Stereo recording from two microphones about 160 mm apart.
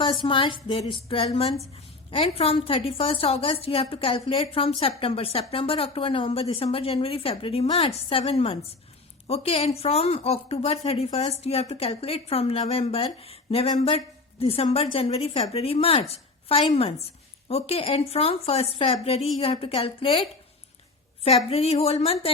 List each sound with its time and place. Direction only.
0.0 s speech: 30° left (ahead or behind)
21.2 s speech: 40° left (ahead or behind)